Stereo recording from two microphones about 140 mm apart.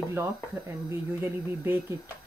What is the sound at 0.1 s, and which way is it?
Speech, 20° right (ahead or behind).